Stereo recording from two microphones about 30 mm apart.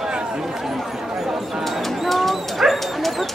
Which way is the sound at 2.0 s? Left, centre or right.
Centre.